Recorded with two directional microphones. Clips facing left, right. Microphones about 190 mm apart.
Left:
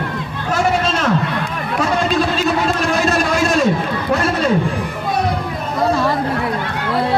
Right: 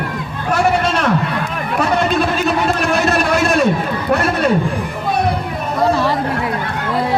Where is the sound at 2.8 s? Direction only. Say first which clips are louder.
Right 1 dB; 60° right (ahead or behind).